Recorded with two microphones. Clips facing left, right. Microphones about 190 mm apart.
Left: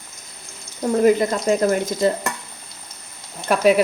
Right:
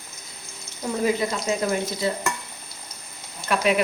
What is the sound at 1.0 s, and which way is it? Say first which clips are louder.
Stir: left 7 dB; 50° left (ahead or behind).